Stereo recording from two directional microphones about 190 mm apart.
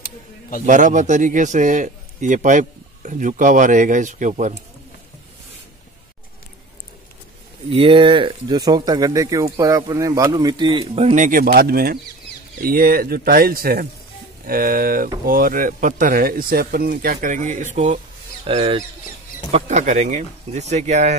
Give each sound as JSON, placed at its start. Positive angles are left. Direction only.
{"t": 0.7, "sound": "speech", "side_deg": -40}
{"t": 7.7, "sound": "speech", "side_deg": -30}
{"t": 19.5, "sound": "speech", "side_deg": -40}